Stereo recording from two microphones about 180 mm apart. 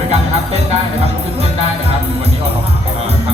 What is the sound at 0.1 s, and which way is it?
Music, 35° right (ahead or behind).